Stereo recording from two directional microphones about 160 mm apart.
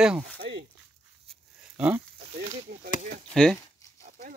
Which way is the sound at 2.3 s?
45° right (ahead or behind).